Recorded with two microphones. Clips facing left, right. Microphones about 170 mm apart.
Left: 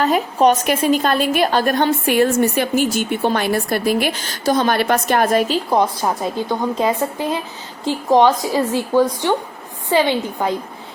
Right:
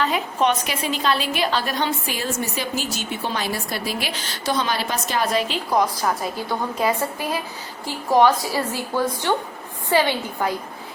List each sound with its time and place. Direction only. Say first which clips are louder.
0.0 s a woman's voice: left 6 dB; 40° left (ahead or behind)
5.7 s a woman's voice: left 1 dB; 25° left (ahead or behind)